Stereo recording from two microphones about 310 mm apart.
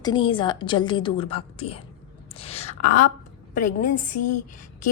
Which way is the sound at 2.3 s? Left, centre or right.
Centre.